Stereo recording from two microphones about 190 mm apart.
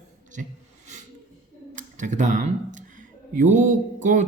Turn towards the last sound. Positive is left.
turn(degrees=-40)  # may be behind; listen again after turning